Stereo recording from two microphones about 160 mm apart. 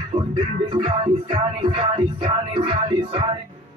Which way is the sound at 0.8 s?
30° right (ahead or behind).